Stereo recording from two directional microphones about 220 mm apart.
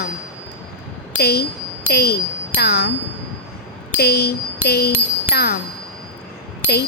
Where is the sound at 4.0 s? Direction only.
45° left (ahead or behind).